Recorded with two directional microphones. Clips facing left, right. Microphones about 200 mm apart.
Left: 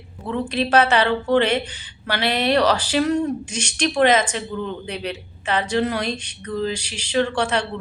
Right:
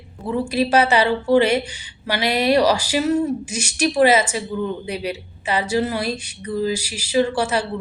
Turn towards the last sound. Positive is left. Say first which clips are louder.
# right 2 dB
turn(degrees=-5)  # may be behind; listen again after turning